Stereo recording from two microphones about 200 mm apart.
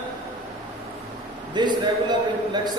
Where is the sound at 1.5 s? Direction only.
20° right (ahead or behind).